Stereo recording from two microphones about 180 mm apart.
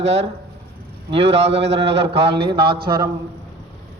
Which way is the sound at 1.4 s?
75° right (ahead or behind).